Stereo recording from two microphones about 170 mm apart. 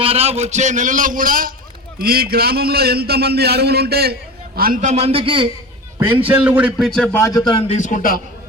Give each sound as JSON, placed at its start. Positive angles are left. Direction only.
{"t": 0.0, "sound": "a man's voice", "side_deg": -35}
{"t": 6.0, "sound": "a man's voice", "side_deg": -10}
{"t": 7.3, "sound": "a man's voice", "side_deg": 25}
{"t": 7.7, "sound": "a man's voice", "side_deg": 45}